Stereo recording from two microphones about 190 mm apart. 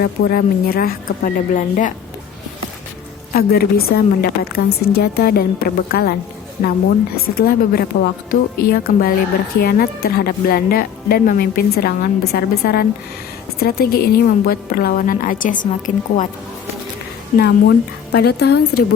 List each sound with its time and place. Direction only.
0.0 s speech: 55° left (ahead or behind)
3.3 s speech: 55° left (ahead or behind)
6.6 s a woman's voice: 45° left (ahead or behind)
17.3 s speech: 60° left (ahead or behind)